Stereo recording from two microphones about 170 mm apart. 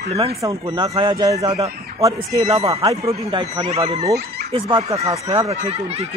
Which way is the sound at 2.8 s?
20° right (ahead or behind).